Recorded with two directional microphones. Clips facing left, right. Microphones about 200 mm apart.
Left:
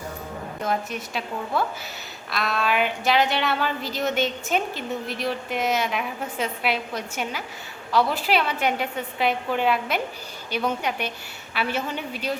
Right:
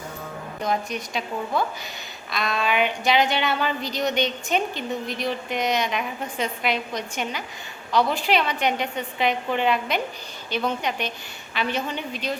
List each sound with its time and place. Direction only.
0.6 s a woman's voice: 5° left (ahead or behind)